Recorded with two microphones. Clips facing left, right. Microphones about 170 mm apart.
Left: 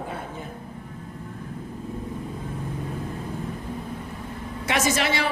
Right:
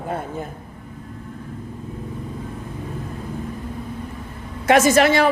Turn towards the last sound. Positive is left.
turn(degrees=-50)  # may be behind; listen again after turning